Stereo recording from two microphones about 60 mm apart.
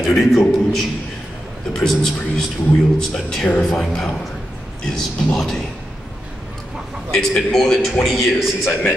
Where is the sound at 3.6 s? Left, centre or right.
Centre.